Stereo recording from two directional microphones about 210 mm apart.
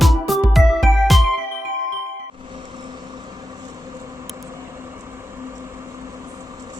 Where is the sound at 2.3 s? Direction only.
25° right (ahead or behind).